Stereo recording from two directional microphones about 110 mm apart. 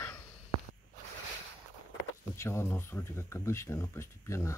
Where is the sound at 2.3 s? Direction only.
25° left (ahead or behind).